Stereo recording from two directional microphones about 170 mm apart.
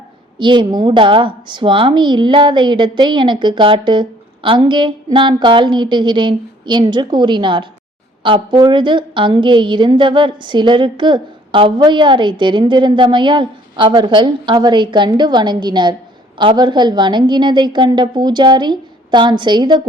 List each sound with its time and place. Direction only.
0.3 s a woman's voice: 30° right (ahead or behind)